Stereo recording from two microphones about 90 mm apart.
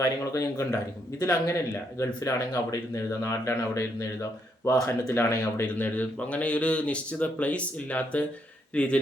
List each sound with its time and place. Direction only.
0.3 s speech: 35° left (ahead or behind)
5.6 s speech: 20° left (ahead or behind)